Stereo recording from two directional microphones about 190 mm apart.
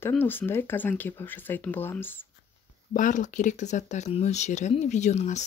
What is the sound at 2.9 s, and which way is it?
Speech, 40° left (ahead or behind).